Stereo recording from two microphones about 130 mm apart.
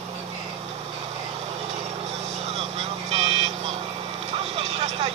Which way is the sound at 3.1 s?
55° right (ahead or behind).